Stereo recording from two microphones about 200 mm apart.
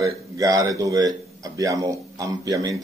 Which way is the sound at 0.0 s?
15° right (ahead or behind).